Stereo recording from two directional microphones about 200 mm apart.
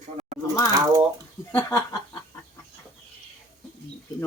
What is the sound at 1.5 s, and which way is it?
Snicker, 15° left (ahead or behind).